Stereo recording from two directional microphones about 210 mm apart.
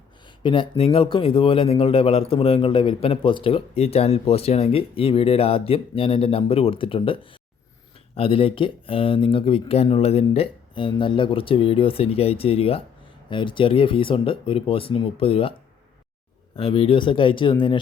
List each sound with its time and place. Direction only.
0.3 s speech: 25° left (ahead or behind)
16.6 s speech: 25° left (ahead or behind)